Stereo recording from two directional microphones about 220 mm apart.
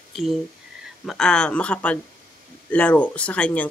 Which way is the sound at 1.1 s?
5° left (ahead or behind).